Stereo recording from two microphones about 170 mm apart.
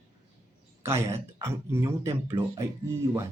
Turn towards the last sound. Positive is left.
turn(degrees=-15)  # may be behind; listen again after turning